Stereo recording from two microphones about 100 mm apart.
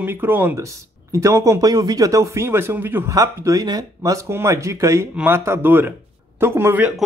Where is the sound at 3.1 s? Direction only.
35° right (ahead or behind).